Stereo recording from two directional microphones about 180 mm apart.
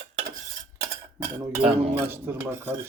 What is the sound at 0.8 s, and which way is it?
Cutlery, 20° right (ahead or behind).